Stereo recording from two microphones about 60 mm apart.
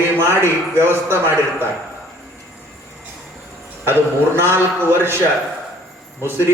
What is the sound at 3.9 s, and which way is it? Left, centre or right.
A man's voice, right.